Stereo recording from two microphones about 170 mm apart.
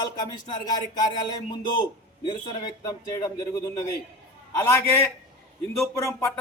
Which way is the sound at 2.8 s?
20° left (ahead or behind).